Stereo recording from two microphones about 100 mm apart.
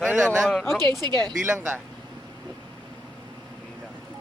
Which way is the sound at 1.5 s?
20° right (ahead or behind).